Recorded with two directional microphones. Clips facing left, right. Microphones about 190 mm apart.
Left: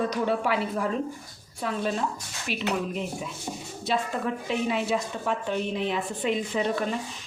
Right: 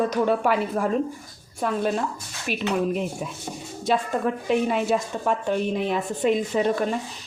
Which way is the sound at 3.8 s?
50° right (ahead or behind).